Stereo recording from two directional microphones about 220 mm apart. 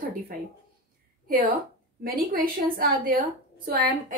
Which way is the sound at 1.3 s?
40° right (ahead or behind).